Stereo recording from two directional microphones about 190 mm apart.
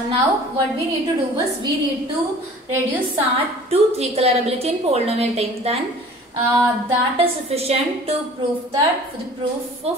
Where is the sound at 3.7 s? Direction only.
35° right (ahead or behind).